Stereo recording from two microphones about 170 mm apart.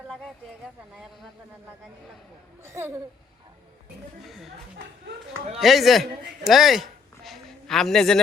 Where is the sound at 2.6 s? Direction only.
15° right (ahead or behind).